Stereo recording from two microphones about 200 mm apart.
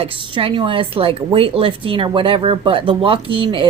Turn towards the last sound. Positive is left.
turn(degrees=-25)  # may be behind; listen again after turning